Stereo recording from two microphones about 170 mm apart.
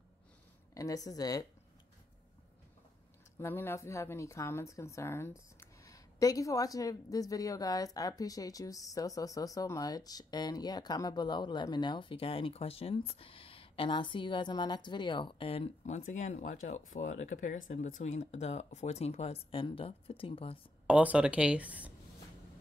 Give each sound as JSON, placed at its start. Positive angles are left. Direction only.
{"t": 0.7, "sound": "a woman's voice", "side_deg": 20}
{"t": 3.3, "sound": "a woman's voice", "side_deg": 15}
{"t": 20.8, "sound": "speech", "side_deg": -10}